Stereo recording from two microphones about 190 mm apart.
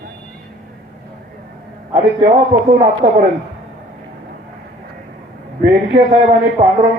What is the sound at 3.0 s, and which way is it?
Speech, 45° right (ahead or behind).